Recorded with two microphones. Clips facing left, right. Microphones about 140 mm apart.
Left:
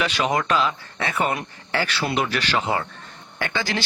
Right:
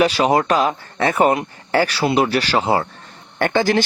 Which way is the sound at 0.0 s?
35° right (ahead or behind).